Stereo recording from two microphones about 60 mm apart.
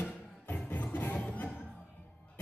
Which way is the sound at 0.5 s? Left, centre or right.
Left.